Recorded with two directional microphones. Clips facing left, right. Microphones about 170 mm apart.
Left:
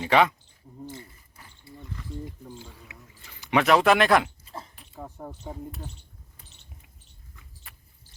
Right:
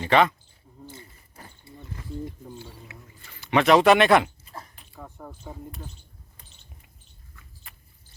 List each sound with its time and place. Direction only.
0.0 s speech: 10° left (ahead or behind)
2.9 s a sound: 15° left (ahead or behind); by 4.3 s centre (ahead or behind)
4.9 s speech: 15° left (ahead or behind)